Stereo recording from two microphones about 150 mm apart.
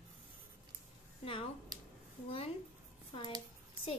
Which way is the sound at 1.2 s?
40° left (ahead or behind).